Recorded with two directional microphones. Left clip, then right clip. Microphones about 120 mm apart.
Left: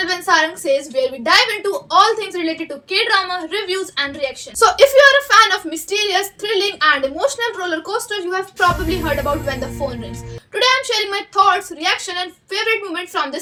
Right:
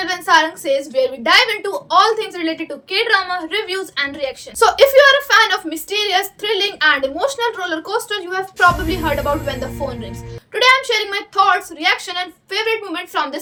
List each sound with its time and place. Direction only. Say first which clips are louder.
0.0 s a woman's voice: right 1 dB; 40° right (ahead or behind)
8.5 s a woman's voice: right 3 dB; centre (ahead or behind)
10.8 s a woman's voice: right 1 dB; 40° right (ahead or behind)